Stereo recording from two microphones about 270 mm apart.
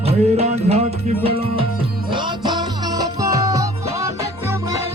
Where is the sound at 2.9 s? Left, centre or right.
Centre.